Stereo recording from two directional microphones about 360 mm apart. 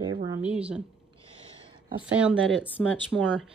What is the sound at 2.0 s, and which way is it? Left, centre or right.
Speech, centre.